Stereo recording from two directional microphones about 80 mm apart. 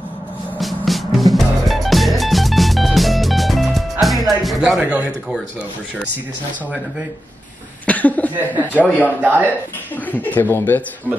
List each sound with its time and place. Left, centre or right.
0.6 s music: centre
4.7 s speech: centre
7.8 s cough: centre
8.7 s speech: left
9.2 s speech: right
10.1 s speech: left